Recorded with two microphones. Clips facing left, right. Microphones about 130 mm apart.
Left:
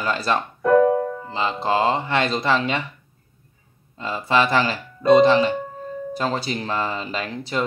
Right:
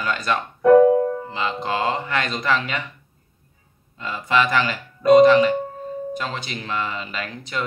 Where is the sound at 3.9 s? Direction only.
30° left (ahead or behind).